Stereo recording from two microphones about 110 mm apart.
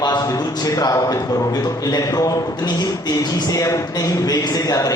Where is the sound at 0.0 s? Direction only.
35° left (ahead or behind).